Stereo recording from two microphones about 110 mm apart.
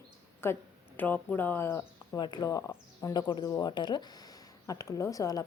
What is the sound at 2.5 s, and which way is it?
Speech, 25° left (ahead or behind).